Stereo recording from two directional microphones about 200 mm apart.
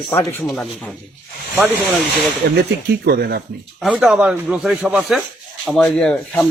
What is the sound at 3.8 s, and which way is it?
Speech, 5° right (ahead or behind).